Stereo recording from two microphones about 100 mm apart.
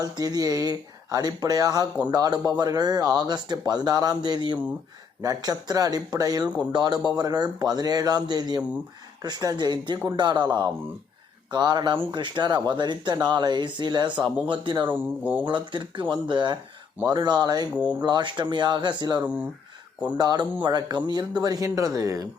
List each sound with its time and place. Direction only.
0.0 s a man's voice: 40° right (ahead or behind)
14.9 s speech: 20° right (ahead or behind)
15.4 s a man's voice: 50° right (ahead or behind)
19.2 s speech: 15° right (ahead or behind)
20.1 s a man's voice: 45° right (ahead or behind)